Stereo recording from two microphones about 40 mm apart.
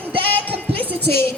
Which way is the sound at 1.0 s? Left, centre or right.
Left.